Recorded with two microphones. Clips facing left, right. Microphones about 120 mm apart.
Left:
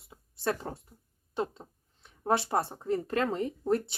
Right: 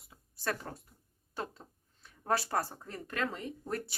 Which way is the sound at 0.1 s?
25° left (ahead or behind).